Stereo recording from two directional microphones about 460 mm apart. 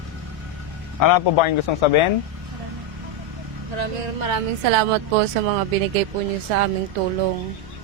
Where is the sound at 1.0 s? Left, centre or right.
Left.